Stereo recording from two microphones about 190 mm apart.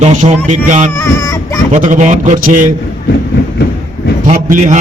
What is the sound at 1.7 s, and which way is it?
A man's voice, 40° right (ahead or behind).